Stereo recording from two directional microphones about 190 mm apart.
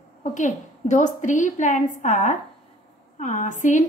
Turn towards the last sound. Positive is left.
turn(degrees=40)  # may be behind; listen again after turning